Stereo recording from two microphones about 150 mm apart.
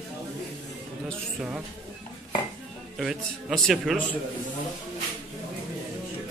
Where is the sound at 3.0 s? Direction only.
Centre (ahead or behind).